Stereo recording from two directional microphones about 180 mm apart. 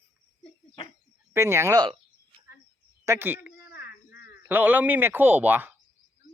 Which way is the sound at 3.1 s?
10° right (ahead or behind).